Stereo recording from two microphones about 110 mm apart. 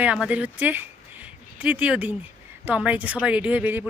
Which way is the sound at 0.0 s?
10° right (ahead or behind).